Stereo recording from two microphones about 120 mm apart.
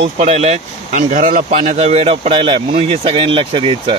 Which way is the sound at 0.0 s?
60° right (ahead or behind).